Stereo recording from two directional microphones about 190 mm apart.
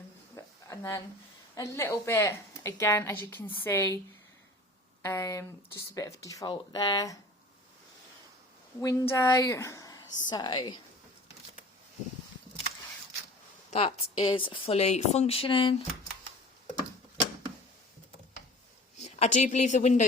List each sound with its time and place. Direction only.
0.3 s a sound: 15° left (ahead or behind)
1.5 s speech: 15° left (ahead or behind)
5.0 s speech: 15° left (ahead or behind)
8.8 s speech: 20° left (ahead or behind)
13.7 s speech: 30° left (ahead or behind)
18.9 s speech: 35° left (ahead or behind)